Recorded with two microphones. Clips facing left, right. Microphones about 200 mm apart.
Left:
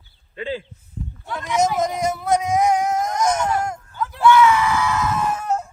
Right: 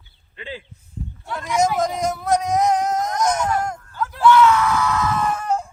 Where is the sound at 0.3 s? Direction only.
40° left (ahead or behind).